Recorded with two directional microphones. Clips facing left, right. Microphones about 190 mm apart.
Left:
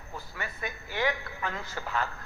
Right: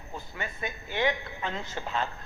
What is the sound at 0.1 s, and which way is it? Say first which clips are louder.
A woman's voice: right 2 dB; 20° right (ahead or behind).